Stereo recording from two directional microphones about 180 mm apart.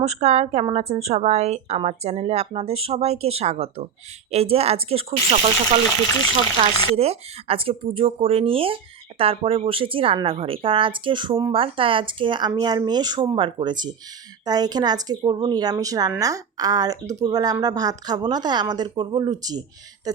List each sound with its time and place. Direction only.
0.0 s speech: 40° right (ahead or behind)
6.9 s a woman's voice: 35° right (ahead or behind)